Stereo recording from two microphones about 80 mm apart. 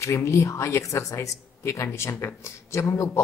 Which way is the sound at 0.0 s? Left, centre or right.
Left.